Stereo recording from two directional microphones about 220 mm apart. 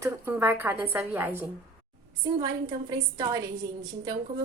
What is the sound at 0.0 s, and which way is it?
A woman's voice, 10° right (ahead or behind).